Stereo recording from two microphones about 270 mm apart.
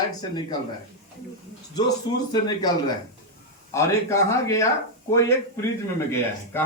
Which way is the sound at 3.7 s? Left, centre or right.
Centre.